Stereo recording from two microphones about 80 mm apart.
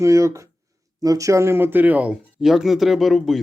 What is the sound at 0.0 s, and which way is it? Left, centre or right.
Speech, right.